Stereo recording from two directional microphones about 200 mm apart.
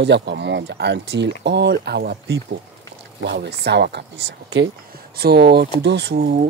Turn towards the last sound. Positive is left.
turn(degrees=-50)  # may be behind; listen again after turning